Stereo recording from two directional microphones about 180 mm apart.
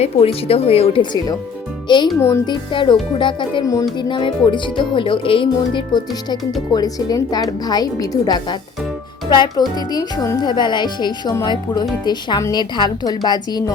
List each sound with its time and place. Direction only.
0.0 s speech: 35° left (ahead or behind)